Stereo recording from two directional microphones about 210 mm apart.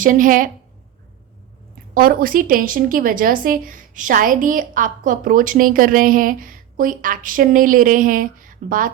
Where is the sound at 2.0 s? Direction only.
45° right (ahead or behind).